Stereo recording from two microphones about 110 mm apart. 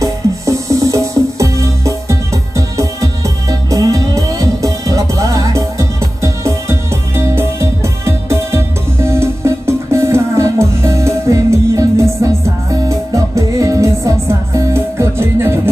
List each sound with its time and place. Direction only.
0.0 s music: 30° right (ahead or behind)